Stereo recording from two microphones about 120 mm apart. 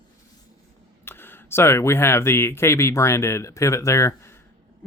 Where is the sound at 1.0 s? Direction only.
20° left (ahead or behind).